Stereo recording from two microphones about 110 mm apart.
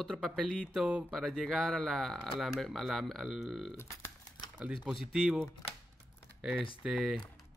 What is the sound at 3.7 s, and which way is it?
Speech, 20° left (ahead or behind).